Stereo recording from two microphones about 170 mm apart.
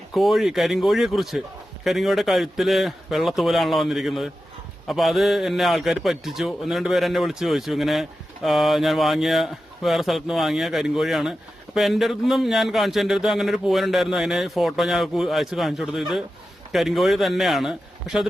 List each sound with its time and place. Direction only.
0.1 s speech: centre (ahead or behind)